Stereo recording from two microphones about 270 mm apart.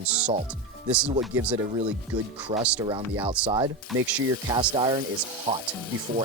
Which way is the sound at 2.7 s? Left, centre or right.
Centre.